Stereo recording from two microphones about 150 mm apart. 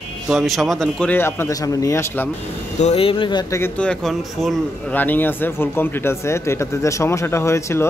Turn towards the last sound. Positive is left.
turn(degrees=20)  # may be behind; listen again after turning